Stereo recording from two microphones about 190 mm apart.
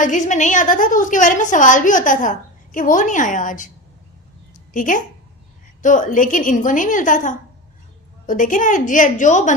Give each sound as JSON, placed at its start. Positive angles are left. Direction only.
{"t": 0.0, "sound": "a woman's voice", "side_deg": 40}
{"t": 4.7, "sound": "a woman's voice", "side_deg": 45}